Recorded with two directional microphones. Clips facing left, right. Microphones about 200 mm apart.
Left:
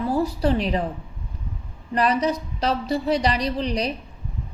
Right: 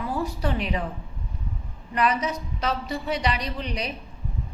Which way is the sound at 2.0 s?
35° left (ahead or behind).